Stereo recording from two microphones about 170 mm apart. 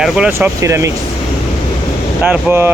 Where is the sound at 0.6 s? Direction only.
15° right (ahead or behind).